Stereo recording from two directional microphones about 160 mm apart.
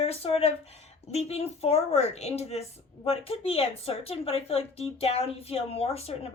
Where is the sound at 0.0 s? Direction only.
40° left (ahead or behind).